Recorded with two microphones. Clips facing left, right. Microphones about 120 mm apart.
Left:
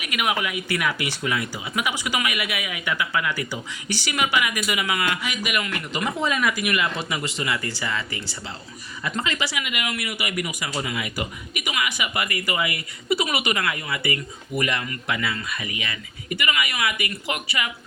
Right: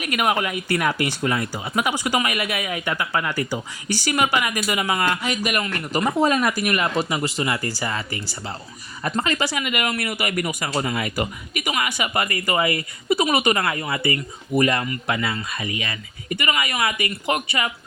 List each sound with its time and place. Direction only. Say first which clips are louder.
0.0 s speech: right 4 dB; 40° right (ahead or behind)